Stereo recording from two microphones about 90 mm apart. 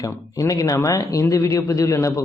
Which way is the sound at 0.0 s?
40° left (ahead or behind).